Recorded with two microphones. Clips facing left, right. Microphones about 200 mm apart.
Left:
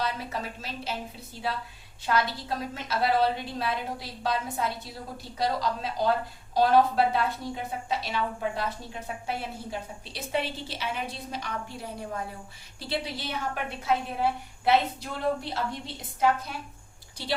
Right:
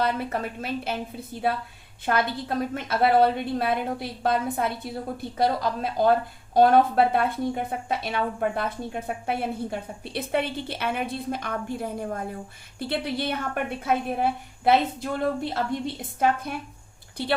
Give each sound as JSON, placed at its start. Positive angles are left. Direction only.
{"t": 0.0, "sound": "a woman's voice", "side_deg": -55}
{"t": 16.2, "sound": "a woman's voice", "side_deg": -55}